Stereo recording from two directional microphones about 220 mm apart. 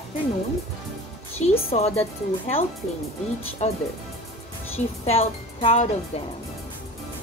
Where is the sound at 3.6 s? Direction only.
30° left (ahead or behind).